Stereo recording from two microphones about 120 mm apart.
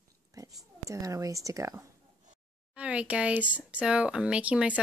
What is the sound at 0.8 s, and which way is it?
Speech, 25° right (ahead or behind).